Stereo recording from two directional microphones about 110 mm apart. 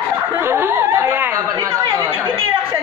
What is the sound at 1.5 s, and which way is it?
Chatter, 30° right (ahead or behind).